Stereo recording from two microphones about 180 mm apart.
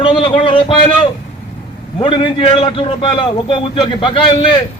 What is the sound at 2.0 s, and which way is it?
A man's voice, 25° left (ahead or behind).